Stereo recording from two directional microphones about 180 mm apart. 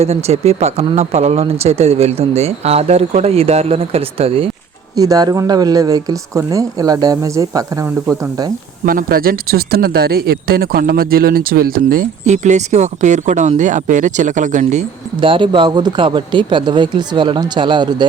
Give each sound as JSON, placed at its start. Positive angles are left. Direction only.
{"t": 0.0, "sound": "speech", "side_deg": -35}
{"t": 4.9, "sound": "speech", "side_deg": -20}
{"t": 8.9, "sound": "speech", "side_deg": -55}